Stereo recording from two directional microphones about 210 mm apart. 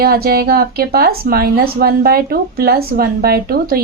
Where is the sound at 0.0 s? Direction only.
45° right (ahead or behind).